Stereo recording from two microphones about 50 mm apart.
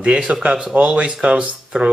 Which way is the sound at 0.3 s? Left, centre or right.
Centre.